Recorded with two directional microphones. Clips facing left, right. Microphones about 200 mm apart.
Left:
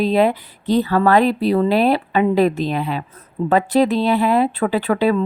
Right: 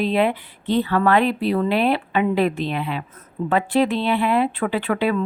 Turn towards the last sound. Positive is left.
turn(degrees=40)  # may be behind; listen again after turning